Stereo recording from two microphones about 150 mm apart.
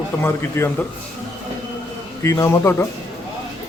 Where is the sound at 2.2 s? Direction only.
20° left (ahead or behind).